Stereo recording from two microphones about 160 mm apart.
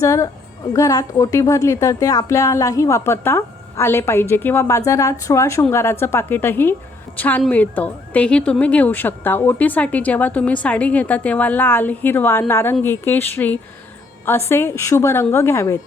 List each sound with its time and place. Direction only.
0.0 s a woman's voice: 20° left (ahead or behind)